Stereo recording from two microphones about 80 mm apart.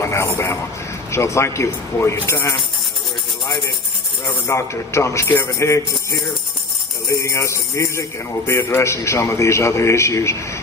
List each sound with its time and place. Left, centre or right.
0.0 s a man's voice: left
4.4 s a man's voice: left